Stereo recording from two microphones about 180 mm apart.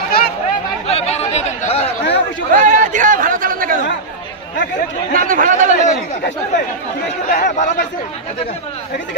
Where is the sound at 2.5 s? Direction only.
45° right (ahead or behind).